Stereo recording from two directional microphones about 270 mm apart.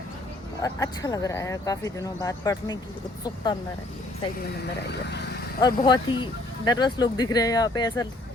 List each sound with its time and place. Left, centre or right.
0.6 s speech: centre
5.5 s speech: centre